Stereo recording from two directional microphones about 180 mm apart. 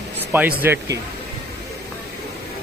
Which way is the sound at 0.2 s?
10° right (ahead or behind).